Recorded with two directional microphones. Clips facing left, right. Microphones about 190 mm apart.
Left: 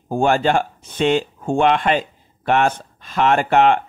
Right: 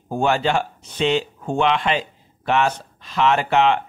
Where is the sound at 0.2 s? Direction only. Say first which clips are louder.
Left 3 dB; 50° left (ahead or behind).